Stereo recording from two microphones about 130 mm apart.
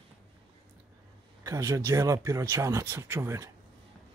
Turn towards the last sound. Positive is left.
turn(degrees=-20)  # may be behind; listen again after turning